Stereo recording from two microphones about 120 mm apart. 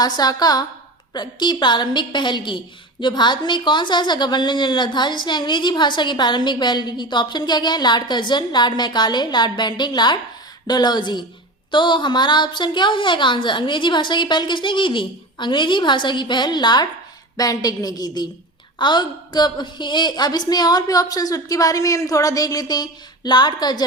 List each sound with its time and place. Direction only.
0.0 s a woman's voice: 35° left (ahead or behind)